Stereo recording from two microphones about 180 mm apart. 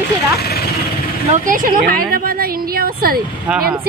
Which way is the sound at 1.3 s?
50° right (ahead or behind).